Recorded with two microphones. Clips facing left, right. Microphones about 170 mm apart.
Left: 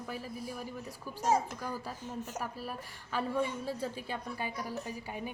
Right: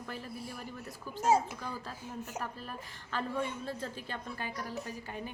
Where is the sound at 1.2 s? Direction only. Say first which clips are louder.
Right 2 dB; 10° right (ahead or behind).